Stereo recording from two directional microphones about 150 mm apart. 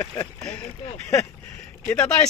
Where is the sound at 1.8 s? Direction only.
5° left (ahead or behind).